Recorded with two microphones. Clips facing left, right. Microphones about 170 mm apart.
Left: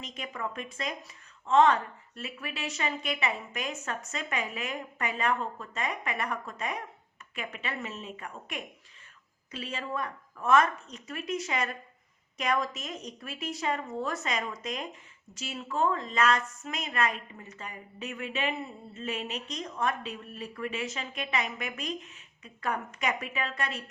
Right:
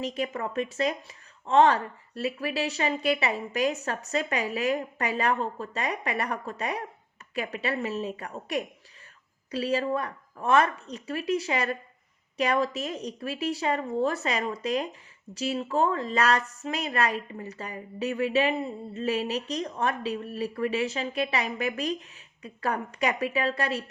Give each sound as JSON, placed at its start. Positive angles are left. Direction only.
{"t": 0.0, "sound": "a woman's voice", "side_deg": -35}